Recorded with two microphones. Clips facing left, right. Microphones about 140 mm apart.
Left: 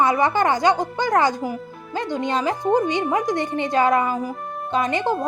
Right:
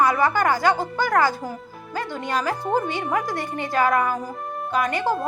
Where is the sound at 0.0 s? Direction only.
20° left (ahead or behind).